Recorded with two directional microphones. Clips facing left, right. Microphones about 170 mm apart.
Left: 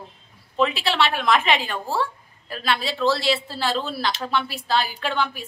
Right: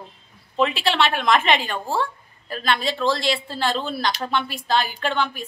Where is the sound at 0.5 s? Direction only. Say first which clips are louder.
Right 1 dB; centre (ahead or behind).